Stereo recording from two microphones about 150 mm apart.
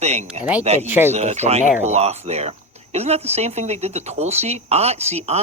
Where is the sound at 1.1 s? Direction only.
50° right (ahead or behind).